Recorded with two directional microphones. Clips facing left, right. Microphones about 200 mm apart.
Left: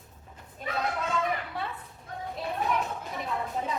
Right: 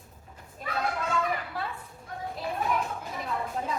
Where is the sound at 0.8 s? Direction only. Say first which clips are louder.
Right 1 dB; centre (ahead or behind).